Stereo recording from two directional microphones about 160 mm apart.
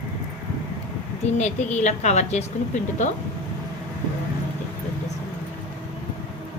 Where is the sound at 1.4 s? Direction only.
50° left (ahead or behind).